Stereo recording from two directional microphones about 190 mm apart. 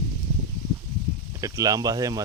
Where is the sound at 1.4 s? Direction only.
20° right (ahead or behind).